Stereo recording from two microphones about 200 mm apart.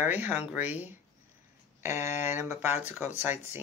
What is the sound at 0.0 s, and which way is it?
Speech, 10° right (ahead or behind).